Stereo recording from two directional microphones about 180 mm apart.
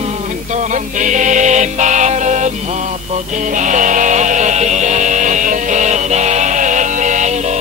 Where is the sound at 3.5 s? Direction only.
45° right (ahead or behind).